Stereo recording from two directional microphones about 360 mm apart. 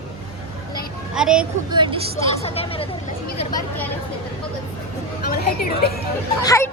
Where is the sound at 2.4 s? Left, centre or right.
Centre.